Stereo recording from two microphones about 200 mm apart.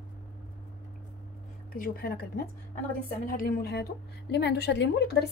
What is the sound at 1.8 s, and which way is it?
A woman's voice, 50° left (ahead or behind).